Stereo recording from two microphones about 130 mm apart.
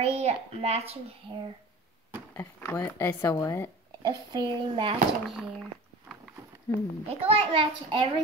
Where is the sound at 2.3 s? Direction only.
20° left (ahead or behind).